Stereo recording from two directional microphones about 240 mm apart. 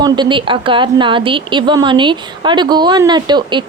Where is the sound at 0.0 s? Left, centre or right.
Centre.